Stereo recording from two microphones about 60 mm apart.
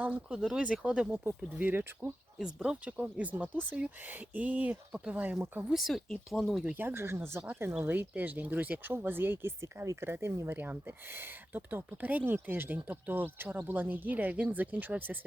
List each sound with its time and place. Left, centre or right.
0.0 s speech: centre
1.2 s speech: right
2.4 s speech: centre
4.9 s speech: centre
5.1 s speech: right
5.7 s speech: centre
6.7 s speech: right
7.8 s speech: right